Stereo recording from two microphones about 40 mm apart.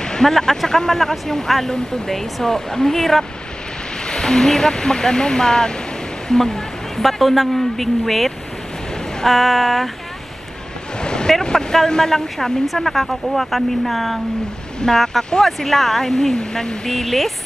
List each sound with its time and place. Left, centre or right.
0.0 s speech: centre
7.0 s speech: centre
11.0 s a sound: left
11.6 s speech: centre
14.8 s speech: centre